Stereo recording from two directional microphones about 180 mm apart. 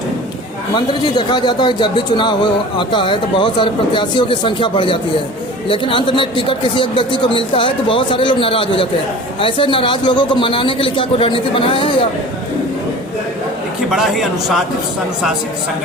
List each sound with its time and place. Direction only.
0.8 s speech: 25° left (ahead or behind)
13.9 s speech: centre (ahead or behind)